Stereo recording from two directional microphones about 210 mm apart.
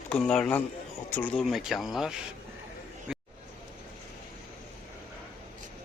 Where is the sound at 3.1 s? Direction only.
5° right (ahead or behind).